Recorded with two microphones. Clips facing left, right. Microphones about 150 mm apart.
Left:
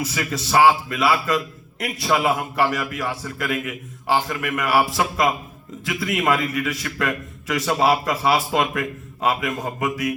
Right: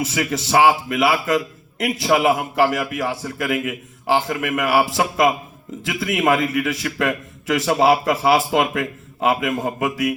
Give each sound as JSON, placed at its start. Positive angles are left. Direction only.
{"t": 0.0, "sound": "a man's voice", "side_deg": -25}